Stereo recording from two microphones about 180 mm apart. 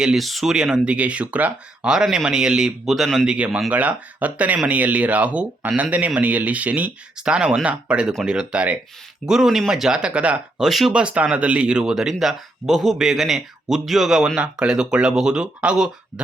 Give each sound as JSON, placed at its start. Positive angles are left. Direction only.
{"t": 0.0, "sound": "speech", "side_deg": 0}